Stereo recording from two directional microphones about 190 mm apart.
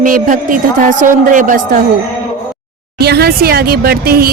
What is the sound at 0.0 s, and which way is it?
Speech, 45° right (ahead or behind).